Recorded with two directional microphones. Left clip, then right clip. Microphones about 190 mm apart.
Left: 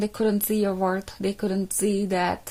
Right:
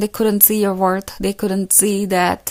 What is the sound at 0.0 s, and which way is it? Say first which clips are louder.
A woman's voice: right 7 dB; 40° right (ahead or behind).